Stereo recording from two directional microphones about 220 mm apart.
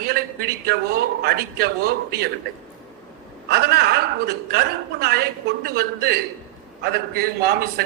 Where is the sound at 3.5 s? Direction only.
45° right (ahead or behind).